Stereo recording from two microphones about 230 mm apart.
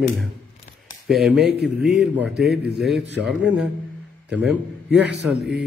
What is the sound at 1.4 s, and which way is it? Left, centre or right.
Speech, right.